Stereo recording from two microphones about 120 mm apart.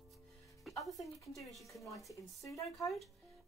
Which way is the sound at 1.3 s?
Centre (ahead or behind).